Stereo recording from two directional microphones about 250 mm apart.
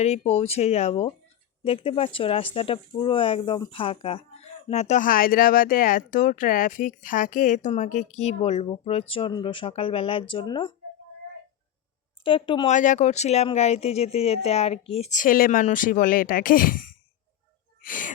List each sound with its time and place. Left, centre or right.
0.0 s speech: left
12.2 s speech: centre